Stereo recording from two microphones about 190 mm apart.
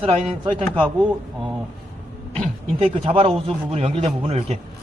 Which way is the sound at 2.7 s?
30° right (ahead or behind).